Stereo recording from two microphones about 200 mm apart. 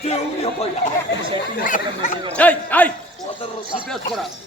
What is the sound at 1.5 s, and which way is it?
Speech, 40° left (ahead or behind).